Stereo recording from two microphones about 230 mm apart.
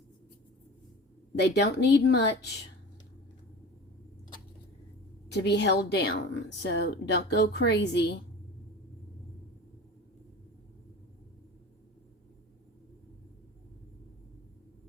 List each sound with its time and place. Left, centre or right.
1.4 s a woman's voice: left
5.3 s a woman's voice: left